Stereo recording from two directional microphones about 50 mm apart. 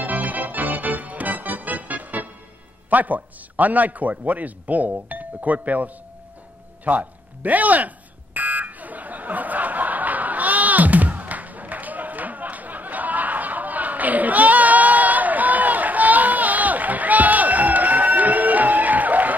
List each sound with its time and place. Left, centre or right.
0.0 s organ: right
2.9 s a man's voice: right
6.8 s a sound: right